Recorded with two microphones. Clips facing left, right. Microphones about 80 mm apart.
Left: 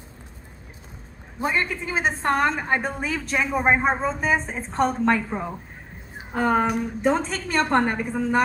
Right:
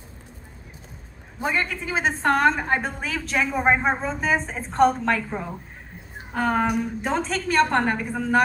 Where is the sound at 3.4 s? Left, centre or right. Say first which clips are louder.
Even; centre.